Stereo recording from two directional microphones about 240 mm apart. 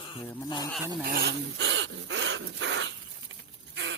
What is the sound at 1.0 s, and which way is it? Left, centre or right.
Dog, right.